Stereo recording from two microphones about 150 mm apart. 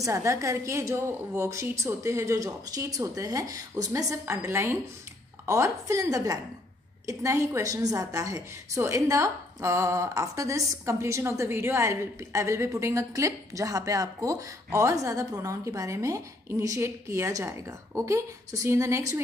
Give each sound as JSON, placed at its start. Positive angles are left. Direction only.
{"t": 0.0, "sound": "a woman's voice", "side_deg": -20}